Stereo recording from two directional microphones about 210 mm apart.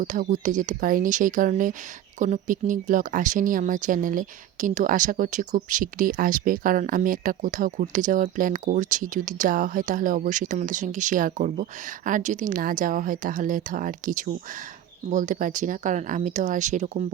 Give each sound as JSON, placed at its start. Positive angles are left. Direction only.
{"t": 0.0, "sound": "speech", "side_deg": -35}